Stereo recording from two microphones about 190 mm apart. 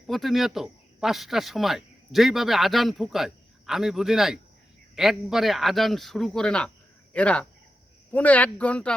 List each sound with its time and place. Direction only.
0.1 s speech: centre (ahead or behind)